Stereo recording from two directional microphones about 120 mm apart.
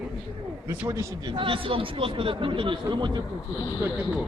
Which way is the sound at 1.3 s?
45° right (ahead or behind).